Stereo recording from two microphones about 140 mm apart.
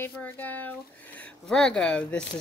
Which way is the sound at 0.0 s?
10° left (ahead or behind).